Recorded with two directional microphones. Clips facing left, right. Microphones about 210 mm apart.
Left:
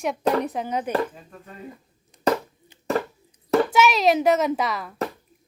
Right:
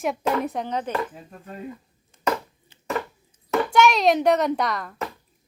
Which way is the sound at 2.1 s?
15° left (ahead or behind).